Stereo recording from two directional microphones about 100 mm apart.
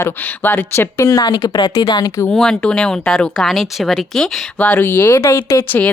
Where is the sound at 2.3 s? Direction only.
5° left (ahead or behind).